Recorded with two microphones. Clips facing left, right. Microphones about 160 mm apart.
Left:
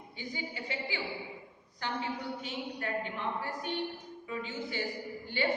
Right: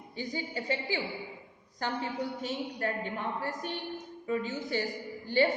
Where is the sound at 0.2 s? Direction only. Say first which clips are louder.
Right 5 dB; 40° right (ahead or behind).